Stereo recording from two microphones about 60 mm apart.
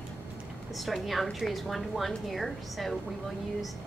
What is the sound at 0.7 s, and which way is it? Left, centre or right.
A woman's voice, centre.